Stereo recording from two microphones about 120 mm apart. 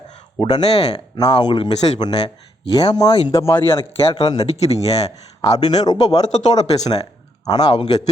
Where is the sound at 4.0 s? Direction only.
50° left (ahead or behind).